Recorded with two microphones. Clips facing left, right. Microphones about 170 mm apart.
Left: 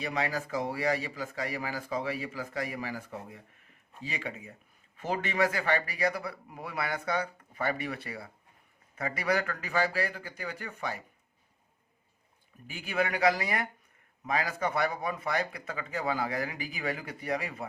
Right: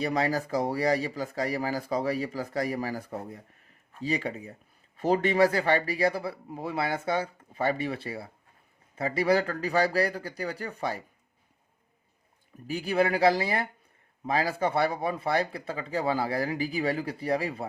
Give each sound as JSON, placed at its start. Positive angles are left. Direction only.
{"t": 0.0, "sound": "speech", "side_deg": -35}
{"t": 12.6, "sound": "speech", "side_deg": -35}